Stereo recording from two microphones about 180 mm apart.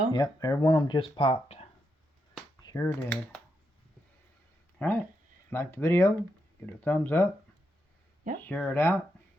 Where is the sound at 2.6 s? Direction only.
15° left (ahead or behind).